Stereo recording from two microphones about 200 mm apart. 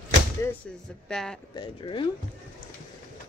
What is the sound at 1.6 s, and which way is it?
Speech, 25° left (ahead or behind).